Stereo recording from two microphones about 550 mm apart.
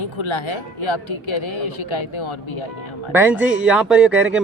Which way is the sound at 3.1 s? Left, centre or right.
Centre.